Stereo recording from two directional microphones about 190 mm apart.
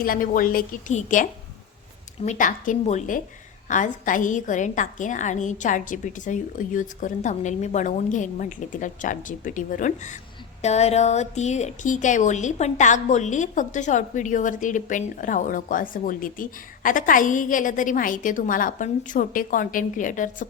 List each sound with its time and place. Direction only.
0.0 s a woman's voice: 45° left (ahead or behind)